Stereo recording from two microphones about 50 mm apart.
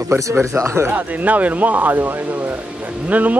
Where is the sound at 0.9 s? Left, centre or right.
Right.